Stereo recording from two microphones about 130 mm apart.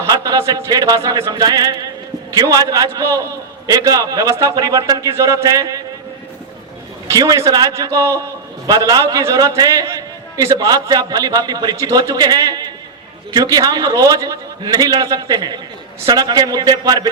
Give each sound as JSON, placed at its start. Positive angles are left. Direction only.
{"t": 0.0, "sound": "a sound", "side_deg": -25}
{"t": 2.3, "sound": "a man's voice", "side_deg": -30}
{"t": 7.1, "sound": "a man's voice", "side_deg": -25}